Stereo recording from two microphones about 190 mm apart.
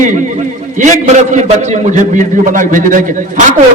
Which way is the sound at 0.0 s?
40° right (ahead or behind).